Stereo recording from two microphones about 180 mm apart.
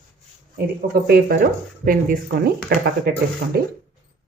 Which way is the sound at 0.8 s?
60° right (ahead or behind).